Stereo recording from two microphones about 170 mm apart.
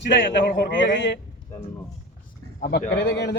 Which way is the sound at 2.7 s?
75° left (ahead or behind).